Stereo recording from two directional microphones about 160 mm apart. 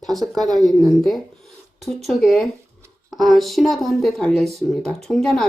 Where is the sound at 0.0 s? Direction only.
Centre (ahead or behind).